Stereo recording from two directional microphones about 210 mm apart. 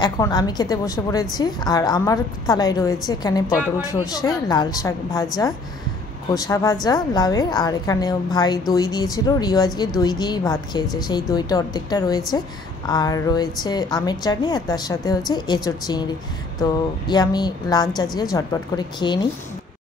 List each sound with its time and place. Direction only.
0.0 s a woman's voice: 20° left (ahead or behind)